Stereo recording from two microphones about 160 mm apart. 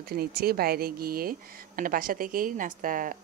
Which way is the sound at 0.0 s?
75° right (ahead or behind).